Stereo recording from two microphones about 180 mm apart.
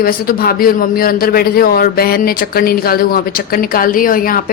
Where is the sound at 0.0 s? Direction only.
55° left (ahead or behind).